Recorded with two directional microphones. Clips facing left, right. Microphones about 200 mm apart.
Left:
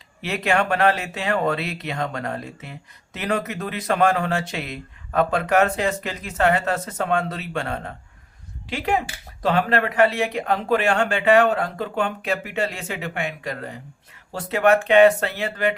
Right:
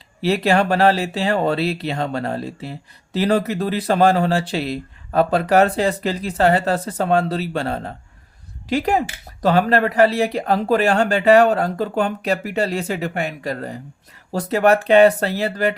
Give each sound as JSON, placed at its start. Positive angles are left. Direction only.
{"t": 0.2, "sound": "speech", "side_deg": -35}